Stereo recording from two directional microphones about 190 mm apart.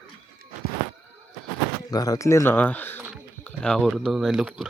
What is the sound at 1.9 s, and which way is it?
Speech, 20° left (ahead or behind).